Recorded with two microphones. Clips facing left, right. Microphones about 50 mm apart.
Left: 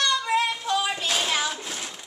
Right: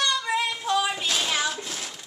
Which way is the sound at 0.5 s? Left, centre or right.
Centre.